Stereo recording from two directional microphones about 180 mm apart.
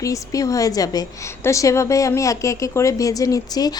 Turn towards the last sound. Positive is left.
turn(degrees=20)  # may be behind; listen again after turning